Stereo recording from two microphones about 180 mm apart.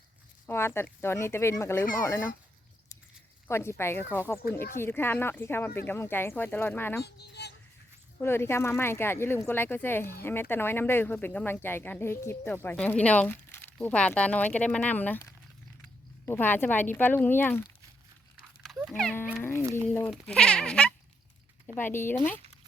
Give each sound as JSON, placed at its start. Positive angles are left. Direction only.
{"t": 0.4, "sound": "speech", "side_deg": 15}
{"t": 3.4, "sound": "speech", "side_deg": 15}
{"t": 4.4, "sound": "speech", "side_deg": 55}
{"t": 4.8, "sound": "speech", "side_deg": 10}
{"t": 7.0, "sound": "speech", "side_deg": 65}
{"t": 8.2, "sound": "speech", "side_deg": 15}
{"t": 18.8, "sound": "music", "side_deg": 0}
{"t": 19.4, "sound": "cat", "side_deg": 15}
{"t": 20.1, "sound": "speech", "side_deg": 5}